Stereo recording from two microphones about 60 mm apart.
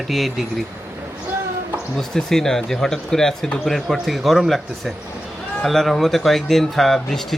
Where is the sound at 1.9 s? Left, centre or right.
Centre.